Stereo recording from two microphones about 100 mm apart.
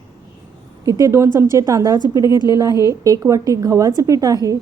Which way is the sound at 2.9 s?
30° right (ahead or behind).